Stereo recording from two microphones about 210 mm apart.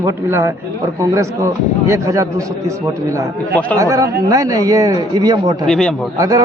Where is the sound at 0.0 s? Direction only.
15° right (ahead or behind).